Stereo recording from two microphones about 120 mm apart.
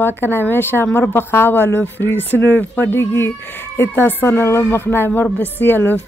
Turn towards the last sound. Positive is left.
turn(degrees=15)  # may be behind; listen again after turning